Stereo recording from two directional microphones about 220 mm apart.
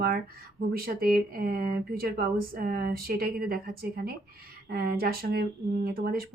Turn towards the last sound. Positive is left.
turn(degrees=-45)  # may be behind; listen again after turning